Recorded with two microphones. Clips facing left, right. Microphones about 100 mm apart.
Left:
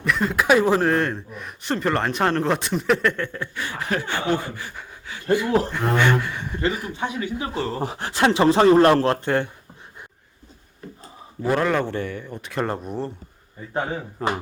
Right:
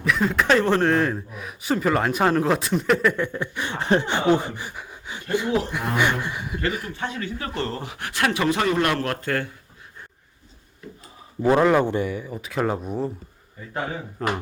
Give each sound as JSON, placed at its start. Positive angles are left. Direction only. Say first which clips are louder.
{"t": 0.0, "sound": "a man's voice", "louder": "even", "side_deg": 0}
{"t": 3.2, "sound": "a man's voice", "louder": "right 2 dB", "side_deg": -15}
{"t": 6.7, "sound": "a man's voice", "louder": "left 3 dB", "side_deg": 0}
{"t": 6.9, "sound": "speech", "louder": "left 3 dB", "side_deg": 15}
{"t": 7.8, "sound": "speech", "louder": "left 4 dB", "side_deg": 30}
{"t": 10.8, "sound": "a sound", "louder": "left 1 dB", "side_deg": 40}
{"t": 11.4, "sound": "a man's voice", "louder": "right 4 dB", "side_deg": -15}
{"t": 14.2, "sound": "a man's voice", "louder": "left 1 dB", "side_deg": 5}